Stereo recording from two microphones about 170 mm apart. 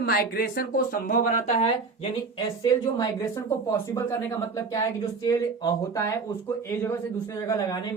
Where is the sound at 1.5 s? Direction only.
35° left (ahead or behind).